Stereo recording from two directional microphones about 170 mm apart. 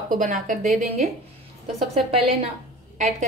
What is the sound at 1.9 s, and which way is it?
Speech, 35° right (ahead or behind).